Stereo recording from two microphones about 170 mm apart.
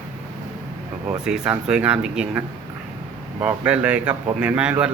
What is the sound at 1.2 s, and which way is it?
Speech, 5° right (ahead or behind).